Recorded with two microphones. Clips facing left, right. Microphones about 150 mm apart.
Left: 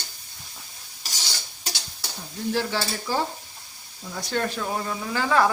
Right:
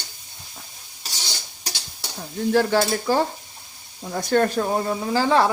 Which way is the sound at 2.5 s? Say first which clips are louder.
Right 8 dB; 50° right (ahead or behind).